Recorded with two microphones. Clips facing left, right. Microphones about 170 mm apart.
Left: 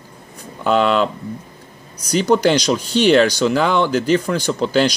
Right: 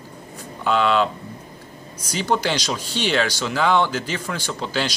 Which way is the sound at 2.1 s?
45° left (ahead or behind).